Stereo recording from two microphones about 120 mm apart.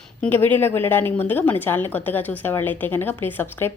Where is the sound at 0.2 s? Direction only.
15° left (ahead or behind).